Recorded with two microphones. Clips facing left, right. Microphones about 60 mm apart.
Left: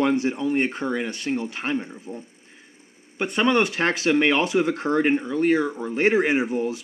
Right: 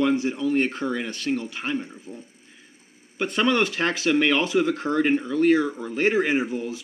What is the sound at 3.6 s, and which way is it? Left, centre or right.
Speech, left.